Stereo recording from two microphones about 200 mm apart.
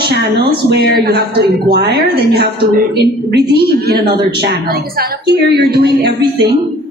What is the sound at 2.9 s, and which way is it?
A woman's voice, 55° right (ahead or behind).